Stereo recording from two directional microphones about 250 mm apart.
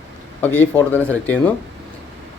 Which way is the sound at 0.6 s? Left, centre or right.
Centre.